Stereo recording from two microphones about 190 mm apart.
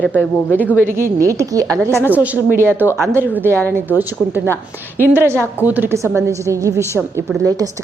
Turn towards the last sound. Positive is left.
turn(degrees=-15)  # may be behind; listen again after turning